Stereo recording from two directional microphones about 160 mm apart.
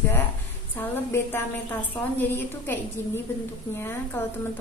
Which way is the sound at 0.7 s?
15° left (ahead or behind).